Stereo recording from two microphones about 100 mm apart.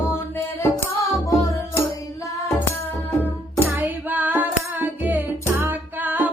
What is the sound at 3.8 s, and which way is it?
Music, 15° right (ahead or behind).